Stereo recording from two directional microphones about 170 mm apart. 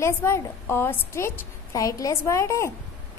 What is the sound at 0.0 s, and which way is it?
A woman's voice, 15° left (ahead or behind).